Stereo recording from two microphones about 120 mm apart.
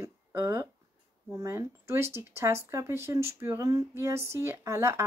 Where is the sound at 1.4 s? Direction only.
25° right (ahead or behind).